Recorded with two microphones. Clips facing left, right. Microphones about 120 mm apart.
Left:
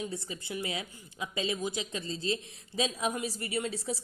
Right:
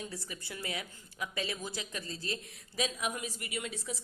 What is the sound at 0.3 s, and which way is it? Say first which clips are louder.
A woman's voice: left 5 dB; 20° left (ahead or behind).